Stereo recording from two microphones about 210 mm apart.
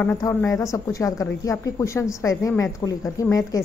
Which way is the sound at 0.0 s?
10° left (ahead or behind).